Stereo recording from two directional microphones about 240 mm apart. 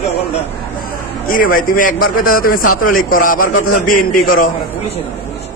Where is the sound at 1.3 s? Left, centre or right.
Left.